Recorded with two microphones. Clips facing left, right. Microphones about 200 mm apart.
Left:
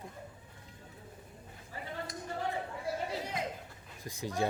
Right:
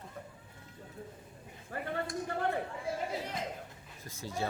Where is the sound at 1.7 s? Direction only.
60° right (ahead or behind).